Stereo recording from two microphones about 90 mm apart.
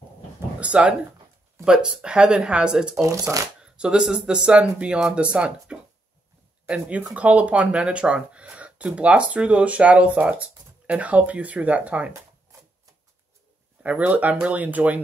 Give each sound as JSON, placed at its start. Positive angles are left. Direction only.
{"t": 0.6, "sound": "speech", "side_deg": -15}
{"t": 3.0, "sound": "speech", "side_deg": -35}
{"t": 3.6, "sound": "speech", "side_deg": -10}
{"t": 13.8, "sound": "speech", "side_deg": -15}